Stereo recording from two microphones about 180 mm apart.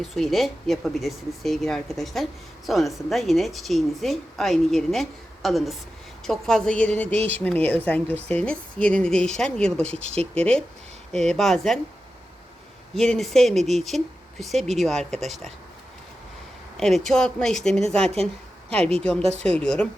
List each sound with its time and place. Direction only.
0.0 s speech: centre (ahead or behind)
12.9 s speech: centre (ahead or behind)
16.7 s speech: centre (ahead or behind)
18.8 s a woman's voice: 35° right (ahead or behind)
19.4 s speech: 5° left (ahead or behind)